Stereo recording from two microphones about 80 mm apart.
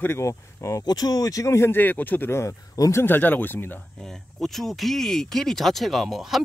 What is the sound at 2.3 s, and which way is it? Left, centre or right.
Speech, left.